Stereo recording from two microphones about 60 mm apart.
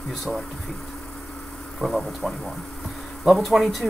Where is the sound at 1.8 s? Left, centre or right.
Centre.